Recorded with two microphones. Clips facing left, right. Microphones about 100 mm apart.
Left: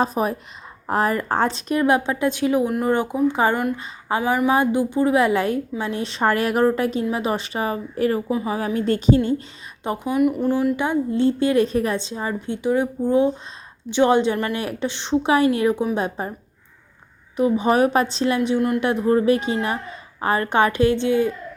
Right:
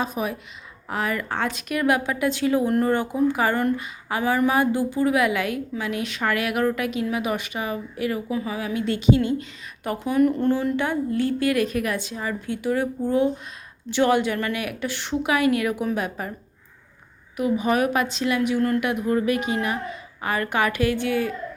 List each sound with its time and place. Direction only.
0.0 s a woman's voice: 40° left (ahead or behind)
9.8 s a woman's voice: 20° left (ahead or behind)
17.3 s a woman's voice: 30° left (ahead or behind)
18.8 s a woman's voice: 30° left (ahead or behind)